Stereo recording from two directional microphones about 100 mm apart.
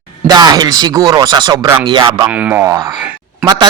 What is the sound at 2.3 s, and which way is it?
Speech, 15° right (ahead or behind).